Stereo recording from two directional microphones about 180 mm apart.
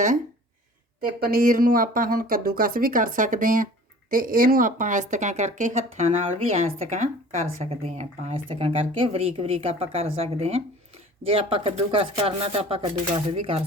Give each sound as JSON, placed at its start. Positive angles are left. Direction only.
{"t": 1.0, "sound": "speech", "side_deg": -55}